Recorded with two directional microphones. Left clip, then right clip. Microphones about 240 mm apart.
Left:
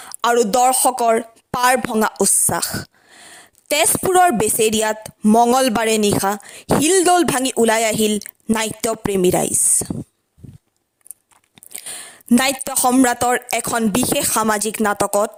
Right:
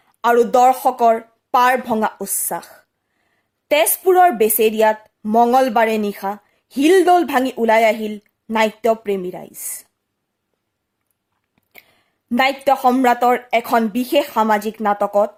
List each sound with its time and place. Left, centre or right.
0.0 s a woman's voice: left
11.7 s a woman's voice: left